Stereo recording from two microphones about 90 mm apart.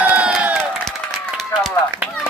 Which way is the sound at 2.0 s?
15° right (ahead or behind).